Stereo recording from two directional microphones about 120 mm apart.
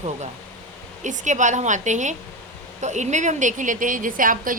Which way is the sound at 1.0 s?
90° right.